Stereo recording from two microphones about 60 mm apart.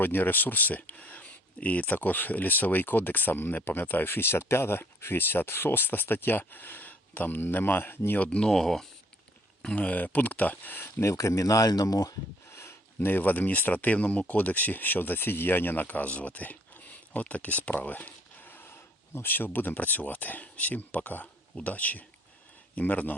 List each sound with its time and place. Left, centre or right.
0.0 s speech: left
8.2 s speech: left
8.4 s speech: centre
9.7 s speech: left
11.0 s speech: left
12.5 s a sound: left
13.1 s speech: left